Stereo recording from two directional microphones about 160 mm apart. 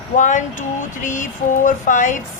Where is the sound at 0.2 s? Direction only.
50° left (ahead or behind).